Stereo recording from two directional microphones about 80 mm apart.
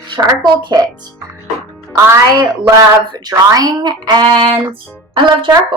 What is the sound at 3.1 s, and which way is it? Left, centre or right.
A woman's voice, right.